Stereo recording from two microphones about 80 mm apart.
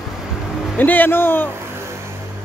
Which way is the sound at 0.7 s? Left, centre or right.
Left.